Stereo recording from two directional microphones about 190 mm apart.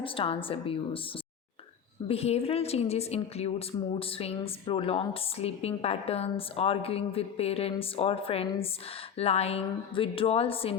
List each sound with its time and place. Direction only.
0.0 s a woman's voice: 30° left (ahead or behind)
2.0 s a woman's voice: 30° left (ahead or behind)